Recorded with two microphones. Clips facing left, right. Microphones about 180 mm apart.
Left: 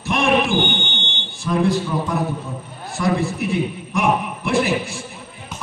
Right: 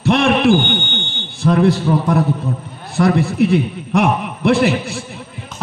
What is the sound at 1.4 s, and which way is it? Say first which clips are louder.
A man's voice: right 5 dB; 65° right (ahead or behind).